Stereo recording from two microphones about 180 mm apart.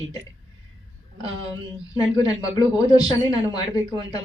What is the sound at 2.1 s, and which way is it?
Speech, 20° left (ahead or behind).